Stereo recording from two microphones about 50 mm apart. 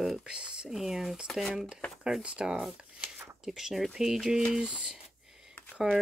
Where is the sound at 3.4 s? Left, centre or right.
Centre.